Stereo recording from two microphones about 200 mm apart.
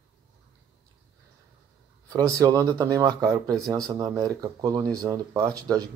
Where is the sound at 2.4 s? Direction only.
20° right (ahead or behind).